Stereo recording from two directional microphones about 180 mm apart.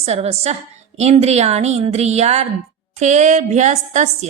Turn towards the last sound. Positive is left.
turn(degrees=-40)  # may be behind; listen again after turning